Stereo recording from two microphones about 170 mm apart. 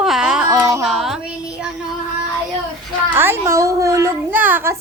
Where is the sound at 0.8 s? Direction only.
Centre (ahead or behind).